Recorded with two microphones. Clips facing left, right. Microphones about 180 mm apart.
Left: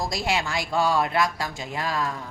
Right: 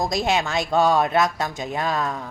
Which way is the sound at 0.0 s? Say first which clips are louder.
Right 4 dB; 20° right (ahead or behind).